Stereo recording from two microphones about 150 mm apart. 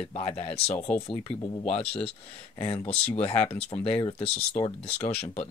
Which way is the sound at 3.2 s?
40° left (ahead or behind).